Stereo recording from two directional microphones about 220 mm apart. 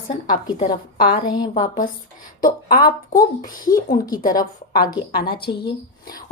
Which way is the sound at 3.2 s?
40° left (ahead or behind).